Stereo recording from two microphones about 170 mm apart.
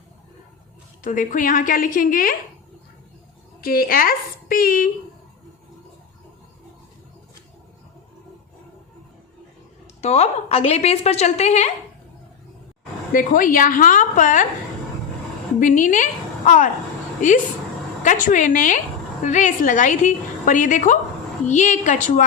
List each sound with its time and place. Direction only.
1.0 s a woman's voice: 50° left (ahead or behind)
3.6 s speech: 60° left (ahead or behind)
9.8 s a woman's voice: 40° left (ahead or behind)
13.1 s a woman's voice: 55° left (ahead or behind)
15.6 s a woman's voice: 50° left (ahead or behind)
17.2 s a woman's voice: 45° left (ahead or behind)